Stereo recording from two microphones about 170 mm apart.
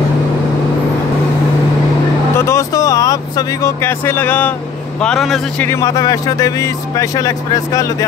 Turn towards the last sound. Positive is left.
turn(degrees=20)  # may be behind; listen again after turning